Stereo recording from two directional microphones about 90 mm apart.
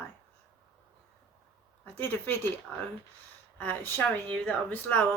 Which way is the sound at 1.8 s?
20° left (ahead or behind).